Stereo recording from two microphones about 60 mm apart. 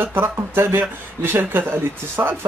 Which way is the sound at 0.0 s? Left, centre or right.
Right.